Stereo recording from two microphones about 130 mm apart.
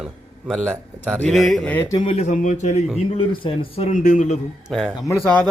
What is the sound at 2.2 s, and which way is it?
Speech, 70° left (ahead or behind).